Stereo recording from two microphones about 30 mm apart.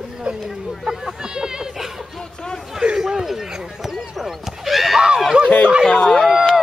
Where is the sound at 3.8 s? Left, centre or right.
Centre.